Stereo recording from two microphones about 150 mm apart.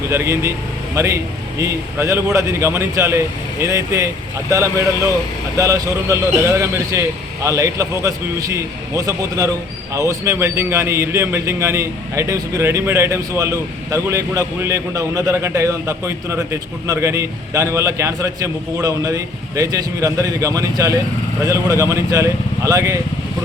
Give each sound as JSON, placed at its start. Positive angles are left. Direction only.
{"t": 0.1, "sound": "a man's voice", "side_deg": -20}